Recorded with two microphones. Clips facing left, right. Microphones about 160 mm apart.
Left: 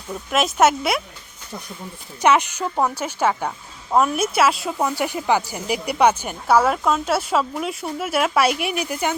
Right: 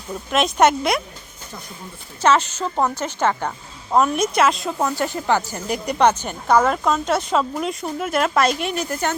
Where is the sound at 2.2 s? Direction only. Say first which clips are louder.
Even; 15° left (ahead or behind).